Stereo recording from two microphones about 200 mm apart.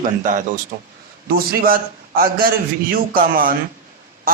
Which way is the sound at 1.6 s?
45° right (ahead or behind).